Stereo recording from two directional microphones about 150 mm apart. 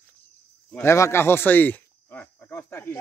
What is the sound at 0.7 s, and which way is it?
Speech, 20° left (ahead or behind).